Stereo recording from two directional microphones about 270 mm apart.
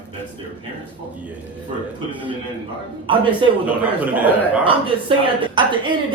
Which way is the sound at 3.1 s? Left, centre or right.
Centre.